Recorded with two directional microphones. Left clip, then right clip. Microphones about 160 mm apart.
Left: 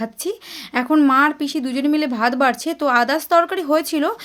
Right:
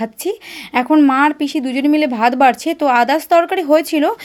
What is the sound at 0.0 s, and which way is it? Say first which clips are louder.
A woman's voice: right 4 dB; 20° right (ahead or behind).